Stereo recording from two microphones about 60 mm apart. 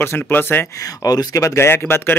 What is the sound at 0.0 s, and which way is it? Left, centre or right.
Speech, left.